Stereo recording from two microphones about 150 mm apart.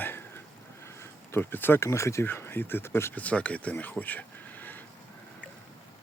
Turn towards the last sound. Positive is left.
turn(degrees=10)  # may be behind; listen again after turning